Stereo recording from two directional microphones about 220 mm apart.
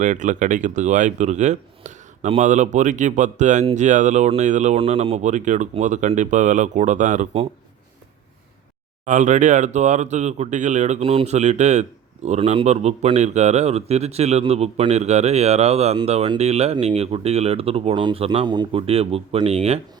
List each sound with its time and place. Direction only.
0.0 s speech: 35° right (ahead or behind)
9.0 s speech: 35° right (ahead or behind)